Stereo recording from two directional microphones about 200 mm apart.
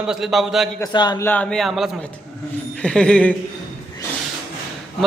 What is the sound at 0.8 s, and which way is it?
A man's voice, 20° left (ahead or behind).